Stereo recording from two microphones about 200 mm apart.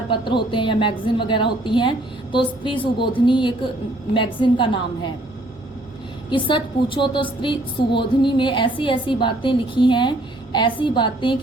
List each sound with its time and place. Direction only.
0.1 s a woman's voice: 25° left (ahead or behind)
6.3 s a woman's voice: 25° left (ahead or behind)